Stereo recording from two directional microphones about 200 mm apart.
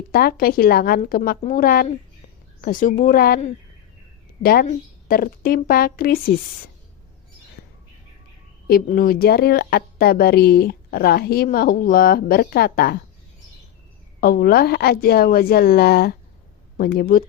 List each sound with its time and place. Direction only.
0.1 s a woman's voice: 50° left (ahead or behind)
4.4 s a woman's voice: 45° left (ahead or behind)
8.6 s a woman's voice: 45° left (ahead or behind)
14.2 s a woman's voice: 45° left (ahead or behind)